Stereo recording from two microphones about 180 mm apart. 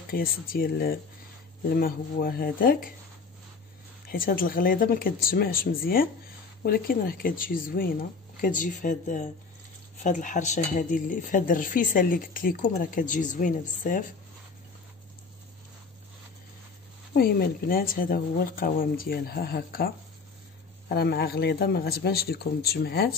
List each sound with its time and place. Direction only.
0.1 s speech: 55° left (ahead or behind)
4.1 s speech: 55° left (ahead or behind)
17.1 s speech: 55° left (ahead or behind)
20.9 s speech: 60° left (ahead or behind)